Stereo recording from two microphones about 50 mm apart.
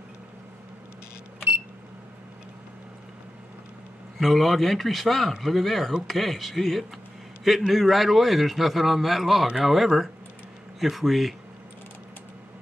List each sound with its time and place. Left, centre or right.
4.2 s a man's voice: centre